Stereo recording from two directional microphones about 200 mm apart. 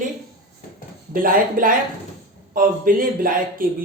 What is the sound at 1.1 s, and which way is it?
Speech, 45° right (ahead or behind).